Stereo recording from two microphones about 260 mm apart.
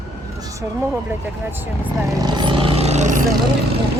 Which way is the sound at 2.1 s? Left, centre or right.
Centre.